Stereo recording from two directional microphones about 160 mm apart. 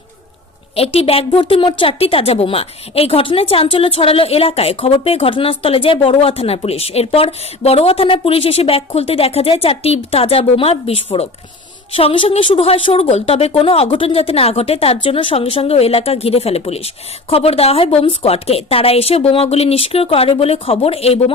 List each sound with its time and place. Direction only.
0.8 s a woman's voice: 35° left (ahead or behind)